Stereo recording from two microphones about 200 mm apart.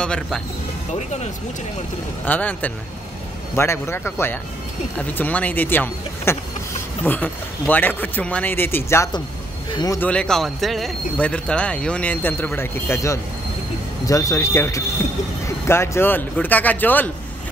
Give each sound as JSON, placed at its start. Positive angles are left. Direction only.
{"t": 0.0, "sound": "speech", "side_deg": 5}
{"t": 2.2, "sound": "speech", "side_deg": 10}
{"t": 10.0, "sound": "speech", "side_deg": 5}